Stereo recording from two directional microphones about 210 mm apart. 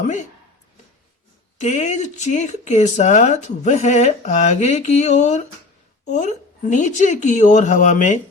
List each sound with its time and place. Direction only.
0.0 s speech: 35° left (ahead or behind)
1.5 s speech: 35° left (ahead or behind)